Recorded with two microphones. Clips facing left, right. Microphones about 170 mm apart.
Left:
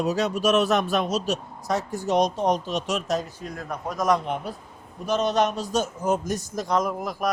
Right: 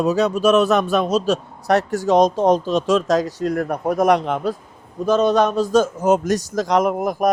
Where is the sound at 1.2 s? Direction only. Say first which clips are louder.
Right 7 dB; 80° right.